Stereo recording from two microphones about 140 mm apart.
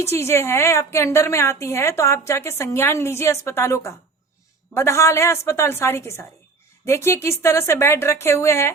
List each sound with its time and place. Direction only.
0.0 s a woman's voice: 20° left (ahead or behind)